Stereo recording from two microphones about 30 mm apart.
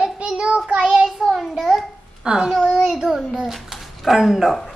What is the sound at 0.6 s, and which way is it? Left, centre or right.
Child singing, right.